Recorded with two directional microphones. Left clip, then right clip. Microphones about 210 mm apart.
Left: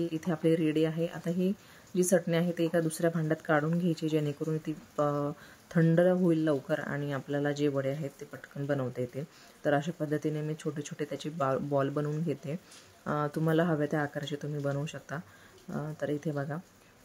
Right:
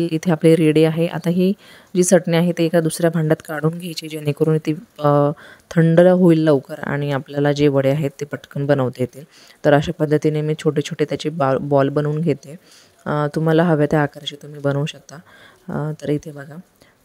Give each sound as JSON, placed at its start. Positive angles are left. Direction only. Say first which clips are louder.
{"t": 0.0, "sound": "speech", "louder": "right 14 dB", "side_deg": -50}
{"t": 3.4, "sound": "speech", "louder": "right 5 dB", "side_deg": 0}
{"t": 4.3, "sound": "speech", "louder": "right 16 dB", "side_deg": -50}